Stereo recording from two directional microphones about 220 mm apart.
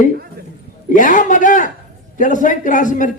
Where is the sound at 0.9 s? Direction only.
35° left (ahead or behind).